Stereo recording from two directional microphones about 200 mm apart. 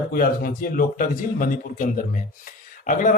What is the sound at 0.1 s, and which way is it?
A man's voice, 45° left (ahead or behind).